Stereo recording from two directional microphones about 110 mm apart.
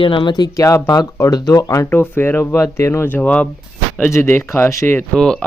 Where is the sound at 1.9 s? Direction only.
20° left (ahead or behind).